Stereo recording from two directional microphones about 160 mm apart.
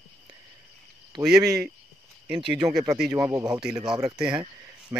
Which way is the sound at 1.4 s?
20° right (ahead or behind).